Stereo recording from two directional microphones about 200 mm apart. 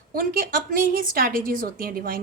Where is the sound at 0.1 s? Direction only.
45° right (ahead or behind).